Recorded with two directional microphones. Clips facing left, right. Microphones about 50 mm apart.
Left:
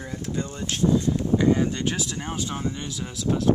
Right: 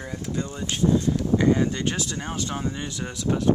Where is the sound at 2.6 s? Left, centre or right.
Centre.